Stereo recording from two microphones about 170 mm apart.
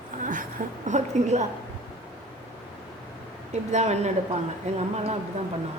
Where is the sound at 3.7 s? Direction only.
40° right (ahead or behind).